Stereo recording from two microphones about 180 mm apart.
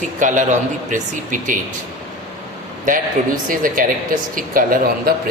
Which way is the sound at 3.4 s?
50° right (ahead or behind).